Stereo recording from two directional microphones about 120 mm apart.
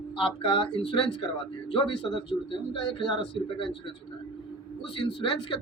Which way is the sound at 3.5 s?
45° left (ahead or behind).